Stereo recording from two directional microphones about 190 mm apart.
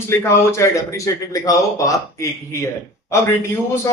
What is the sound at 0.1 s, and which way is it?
A man's voice, 15° left (ahead or behind).